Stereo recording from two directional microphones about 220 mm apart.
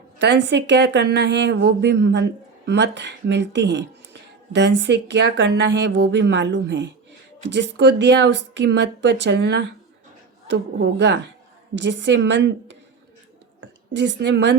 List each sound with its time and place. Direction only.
0.2 s speech: 55° right (ahead or behind)
13.6 s a woman's voice: 50° right (ahead or behind)